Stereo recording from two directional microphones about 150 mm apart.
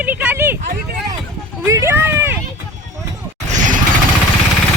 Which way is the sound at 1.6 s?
15° right (ahead or behind).